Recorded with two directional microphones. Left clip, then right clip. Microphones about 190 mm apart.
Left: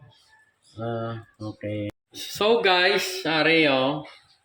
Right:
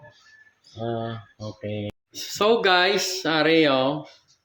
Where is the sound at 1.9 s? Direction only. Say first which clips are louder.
Right 1 dB; 10° right (ahead or behind).